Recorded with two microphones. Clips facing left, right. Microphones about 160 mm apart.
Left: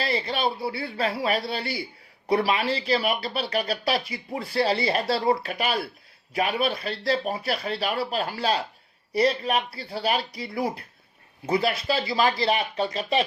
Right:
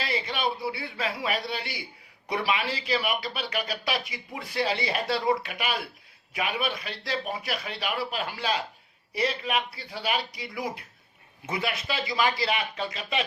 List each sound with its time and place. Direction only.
0.0 s speech: 35° left (ahead or behind)